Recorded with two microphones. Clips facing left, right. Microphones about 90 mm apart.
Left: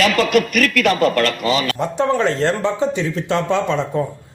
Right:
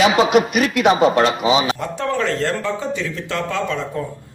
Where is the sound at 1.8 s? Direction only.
25° left (ahead or behind).